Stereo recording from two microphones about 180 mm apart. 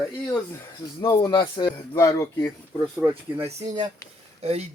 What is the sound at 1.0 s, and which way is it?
Speech, 20° left (ahead or behind).